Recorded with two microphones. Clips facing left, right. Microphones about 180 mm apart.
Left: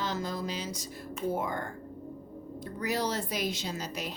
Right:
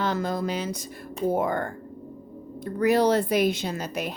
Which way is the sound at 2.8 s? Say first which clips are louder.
Right 11 dB; 60° right (ahead or behind).